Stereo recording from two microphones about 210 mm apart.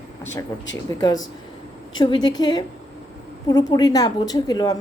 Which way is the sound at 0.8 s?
20° left (ahead or behind).